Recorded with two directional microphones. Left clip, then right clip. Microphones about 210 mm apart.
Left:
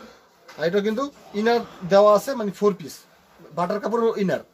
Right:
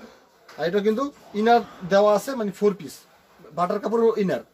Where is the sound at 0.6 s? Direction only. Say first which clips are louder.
Even; 15° left (ahead or behind).